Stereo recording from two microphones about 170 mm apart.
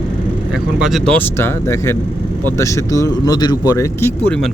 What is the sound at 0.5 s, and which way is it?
Speech, 5° right (ahead or behind).